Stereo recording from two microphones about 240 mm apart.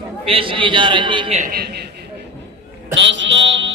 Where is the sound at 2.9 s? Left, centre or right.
Right.